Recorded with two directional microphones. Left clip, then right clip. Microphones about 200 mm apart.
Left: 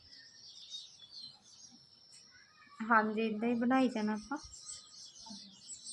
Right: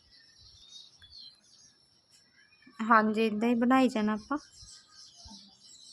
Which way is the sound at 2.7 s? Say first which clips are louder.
Right 6 dB; 55° right (ahead or behind).